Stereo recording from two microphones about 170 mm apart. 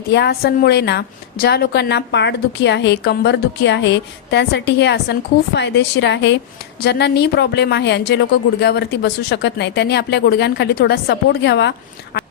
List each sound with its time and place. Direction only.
0.1 s a woman's voice: 80° left